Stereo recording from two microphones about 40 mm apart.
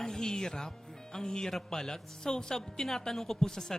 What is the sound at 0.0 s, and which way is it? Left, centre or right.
Music, centre.